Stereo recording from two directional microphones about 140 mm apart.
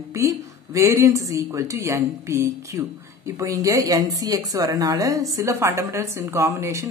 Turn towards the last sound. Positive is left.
turn(degrees=-20)  # may be behind; listen again after turning